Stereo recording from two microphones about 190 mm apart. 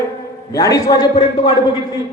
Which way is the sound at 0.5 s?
15° left (ahead or behind).